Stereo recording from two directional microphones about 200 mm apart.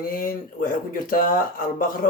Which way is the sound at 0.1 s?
45° left (ahead or behind).